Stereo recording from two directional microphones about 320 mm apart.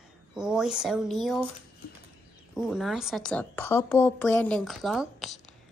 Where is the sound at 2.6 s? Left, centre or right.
Centre.